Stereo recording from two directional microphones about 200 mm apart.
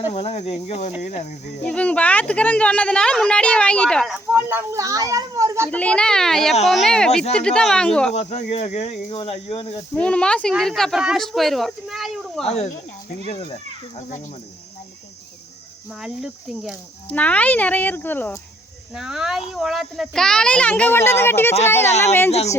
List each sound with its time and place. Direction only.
0.1 s speech: 30° left (ahead or behind)
1.6 s speech: 5° left (ahead or behind); by 5.7 s 15° right (ahead or behind)
5.7 s speech: 5° left (ahead or behind)
8.1 s speech: 35° left (ahead or behind)
9.9 s speech: 5° left (ahead or behind)
12.5 s speech: 35° left (ahead or behind)
15.9 s speech: 5° right (ahead or behind)
17.1 s speech: 5° left (ahead or behind)
18.9 s speech: 5° right (ahead or behind)
21.8 s speech: 35° left (ahead or behind)